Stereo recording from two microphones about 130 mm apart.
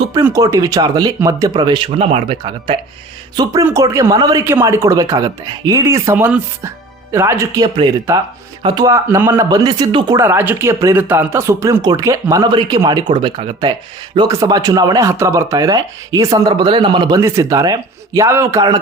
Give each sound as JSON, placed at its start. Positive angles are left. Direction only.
{"t": 0.3, "sound": "speech", "side_deg": -25}
{"t": 2.0, "sound": "speech", "side_deg": -50}
{"t": 3.3, "sound": "speech", "side_deg": -25}
{"t": 8.6, "sound": "speech", "side_deg": -30}
{"t": 9.0, "sound": "speech", "side_deg": -20}
{"t": 10.2, "sound": "speech", "side_deg": -15}
{"t": 14.3, "sound": "speech", "side_deg": -25}
{"t": 17.2, "sound": "speech", "side_deg": -25}